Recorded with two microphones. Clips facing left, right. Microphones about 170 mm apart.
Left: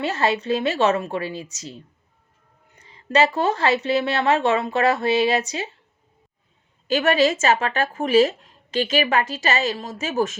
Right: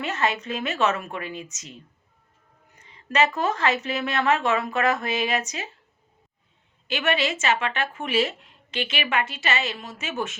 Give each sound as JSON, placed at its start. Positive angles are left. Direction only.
{"t": 0.0, "sound": "speech", "side_deg": 30}
{"t": 6.8, "sound": "speech", "side_deg": 40}